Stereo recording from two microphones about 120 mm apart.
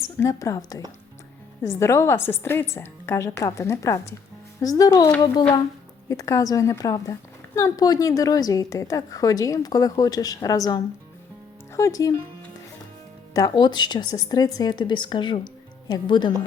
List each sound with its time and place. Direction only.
0.2 s a woman's voice: 25° left (ahead or behind)
6.1 s a woman's voice: 25° left (ahead or behind)
13.3 s speech: 35° left (ahead or behind)